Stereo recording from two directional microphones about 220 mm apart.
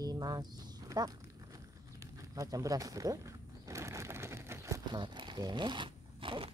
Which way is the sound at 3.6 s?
15° right (ahead or behind).